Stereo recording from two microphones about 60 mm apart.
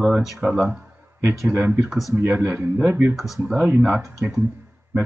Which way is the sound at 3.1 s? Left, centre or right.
Centre.